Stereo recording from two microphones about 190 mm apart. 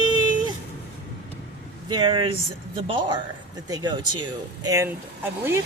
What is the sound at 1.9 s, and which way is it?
Speech, 25° right (ahead or behind).